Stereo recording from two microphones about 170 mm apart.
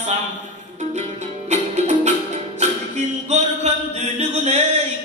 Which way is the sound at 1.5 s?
40° right (ahead or behind).